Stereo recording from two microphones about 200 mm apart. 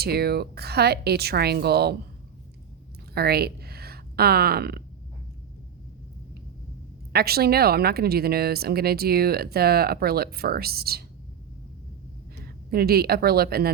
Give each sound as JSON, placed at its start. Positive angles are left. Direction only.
{"t": 0.0, "sound": "a woman's voice", "side_deg": -50}
{"t": 3.2, "sound": "speech", "side_deg": -50}
{"t": 7.1, "sound": "a woman's voice", "side_deg": -50}
{"t": 12.7, "sound": "a woman's voice", "side_deg": -50}